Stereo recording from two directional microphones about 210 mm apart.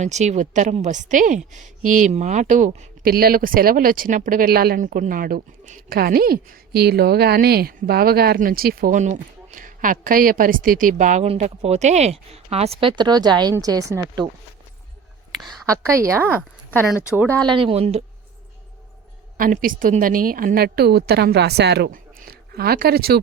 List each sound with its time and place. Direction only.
0.0 s a woman's voice: 35° right (ahead or behind); by 14.3 s 15° right (ahead or behind)
15.4 s a sound: centre (ahead or behind)
15.7 s a woman's voice: 15° right (ahead or behind)
17.2 s speech: 15° right (ahead or behind); by 18.0 s 30° right (ahead or behind)
19.4 s a woman's voice: 40° right (ahead or behind)